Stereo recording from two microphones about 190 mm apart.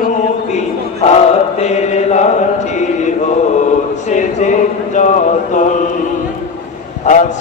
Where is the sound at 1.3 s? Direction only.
35° left (ahead or behind).